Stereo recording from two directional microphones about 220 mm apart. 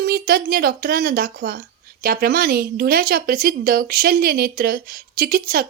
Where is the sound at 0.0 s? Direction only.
45° right (ahead or behind).